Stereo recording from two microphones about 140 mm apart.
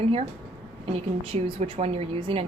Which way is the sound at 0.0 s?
45° right (ahead or behind).